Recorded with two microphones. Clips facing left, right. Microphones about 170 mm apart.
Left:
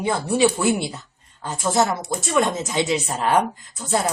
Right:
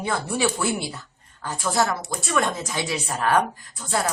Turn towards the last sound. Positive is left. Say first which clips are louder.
# left 5 dB
turn(degrees=20)  # may be behind; listen again after turning